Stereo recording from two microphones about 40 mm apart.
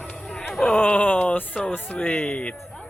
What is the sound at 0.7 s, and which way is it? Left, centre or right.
Speech, left.